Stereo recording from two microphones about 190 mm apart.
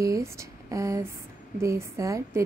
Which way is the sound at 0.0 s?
15° right (ahead or behind).